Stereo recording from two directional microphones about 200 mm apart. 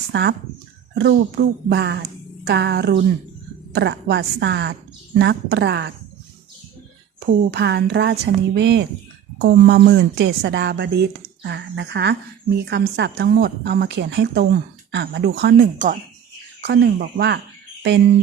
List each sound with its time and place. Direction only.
0.1 s a woman's voice: 55° right (ahead or behind)
7.5 s a woman's voice: 55° right (ahead or behind)
16.6 s a woman's voice: 55° right (ahead or behind)